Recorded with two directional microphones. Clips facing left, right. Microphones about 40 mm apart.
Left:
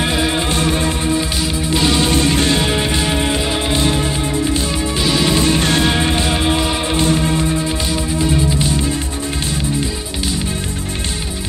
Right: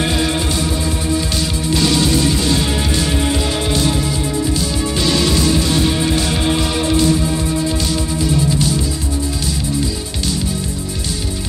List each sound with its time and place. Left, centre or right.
0.0 s music: centre
0.4 s music: left
1.3 s music: left
2.0 s music: left
2.7 s music: left
5.6 s music: left
6.2 s music: left